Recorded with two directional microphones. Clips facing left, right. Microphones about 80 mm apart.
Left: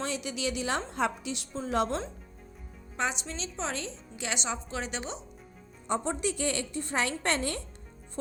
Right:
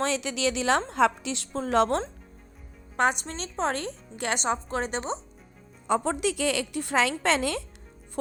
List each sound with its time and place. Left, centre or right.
0.0 s a woman's voice: right
2.9 s a woman's voice: right
5.9 s a woman's voice: right